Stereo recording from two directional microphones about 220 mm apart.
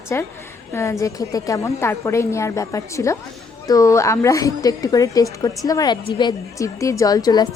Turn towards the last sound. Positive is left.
turn(degrees=15)  # may be behind; listen again after turning